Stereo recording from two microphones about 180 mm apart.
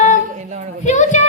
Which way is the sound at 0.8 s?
40° left (ahead or behind).